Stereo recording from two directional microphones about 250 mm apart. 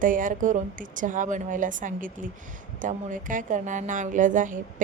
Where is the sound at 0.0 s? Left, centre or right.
Right.